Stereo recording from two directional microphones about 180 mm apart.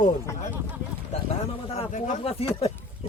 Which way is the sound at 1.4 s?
35° left (ahead or behind).